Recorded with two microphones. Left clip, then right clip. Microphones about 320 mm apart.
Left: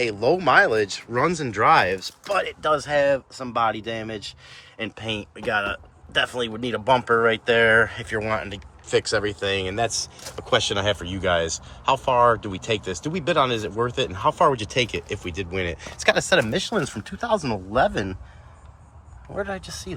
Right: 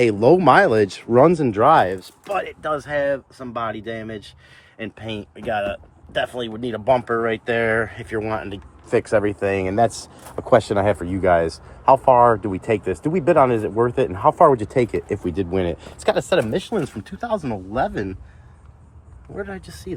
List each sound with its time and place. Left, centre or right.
0.0 s speech: centre
14.6 s speech: right
15.2 s speech: centre
16.0 s speech: centre
19.4 s speech: centre